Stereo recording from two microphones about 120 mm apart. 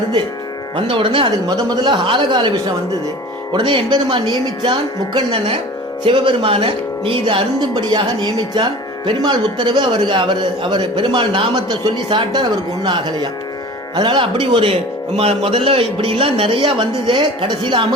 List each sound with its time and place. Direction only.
0.8 s speech: 45° right (ahead or behind)
3.5 s speech: 40° right (ahead or behind)